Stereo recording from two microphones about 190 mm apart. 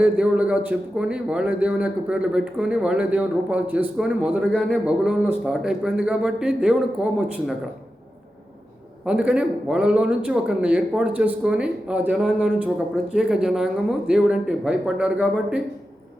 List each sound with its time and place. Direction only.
0.0 s speech: 5° right (ahead or behind)
9.0 s speech: 5° right (ahead or behind)